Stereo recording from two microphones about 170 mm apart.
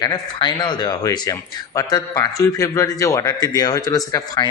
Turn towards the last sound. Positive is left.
turn(degrees=20)  # may be behind; listen again after turning